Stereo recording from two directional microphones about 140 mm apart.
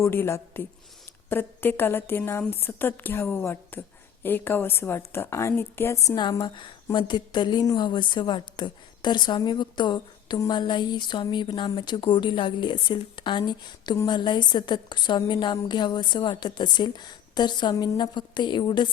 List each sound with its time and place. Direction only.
0.0 s a woman's voice: 20° left (ahead or behind)
6.2 s a woman's voice: 35° left (ahead or behind)